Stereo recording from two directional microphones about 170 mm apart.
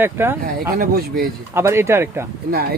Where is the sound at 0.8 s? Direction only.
65° right (ahead or behind).